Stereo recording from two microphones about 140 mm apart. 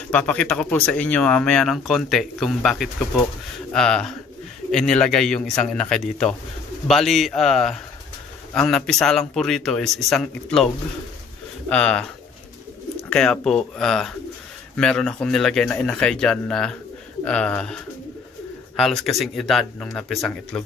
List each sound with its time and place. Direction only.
0.1 s speech: 10° left (ahead or behind)
11.7 s speech: 5° left (ahead or behind)
13.1 s speech: 5° left (ahead or behind)
18.8 s speech: centre (ahead or behind)